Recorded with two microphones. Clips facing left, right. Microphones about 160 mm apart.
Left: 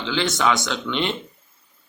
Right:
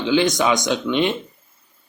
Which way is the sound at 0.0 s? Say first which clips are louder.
Right 4 dB; 15° right (ahead or behind).